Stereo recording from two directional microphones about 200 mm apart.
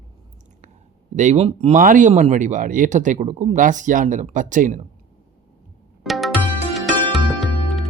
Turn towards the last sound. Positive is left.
turn(degrees=0)  # may be behind; listen again after turning